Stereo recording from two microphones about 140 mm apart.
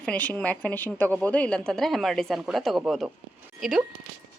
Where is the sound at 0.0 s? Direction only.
10° left (ahead or behind).